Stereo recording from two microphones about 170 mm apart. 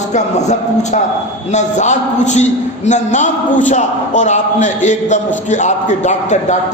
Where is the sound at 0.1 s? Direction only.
45° left (ahead or behind).